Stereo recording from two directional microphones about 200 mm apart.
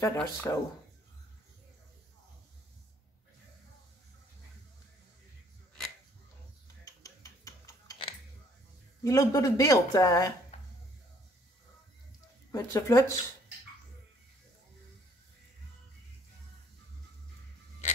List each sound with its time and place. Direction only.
0.0 s speech: 15° left (ahead or behind)
6.8 s a sound: 15° left (ahead or behind)
8.0 s coin: 25° left (ahead or behind)
9.0 s speech: 15° left (ahead or behind)
12.4 s speech: 15° left (ahead or behind)